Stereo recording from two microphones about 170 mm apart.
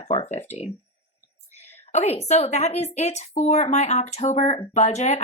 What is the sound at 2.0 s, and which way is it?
Speech, 40° left (ahead or behind).